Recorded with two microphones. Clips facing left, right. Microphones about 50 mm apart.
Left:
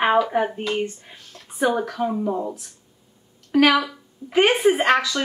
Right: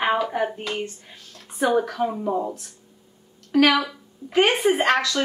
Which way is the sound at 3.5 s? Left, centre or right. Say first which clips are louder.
Left 1 dB; centre.